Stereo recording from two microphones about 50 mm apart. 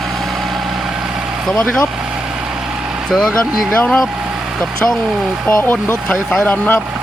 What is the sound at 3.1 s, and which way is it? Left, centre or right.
Speech, centre.